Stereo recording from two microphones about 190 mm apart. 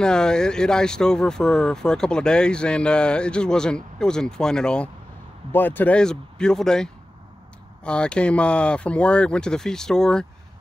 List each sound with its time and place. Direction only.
0.0 s speech: 5° left (ahead or behind)